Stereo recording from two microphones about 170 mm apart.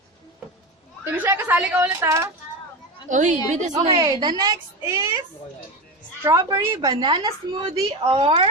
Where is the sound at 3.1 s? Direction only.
45° right (ahead or behind).